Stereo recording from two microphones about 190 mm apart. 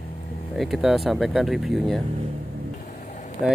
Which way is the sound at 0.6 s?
Centre (ahead or behind).